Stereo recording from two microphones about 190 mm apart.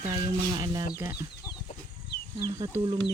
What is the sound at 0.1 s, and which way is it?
Speech, 20° right (ahead or behind).